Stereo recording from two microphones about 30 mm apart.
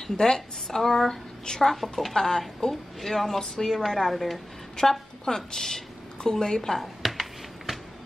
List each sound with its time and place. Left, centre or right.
0.0 s speech: centre
2.7 s speech: centre
4.8 s speech: left
7.0 s computer keyboard: centre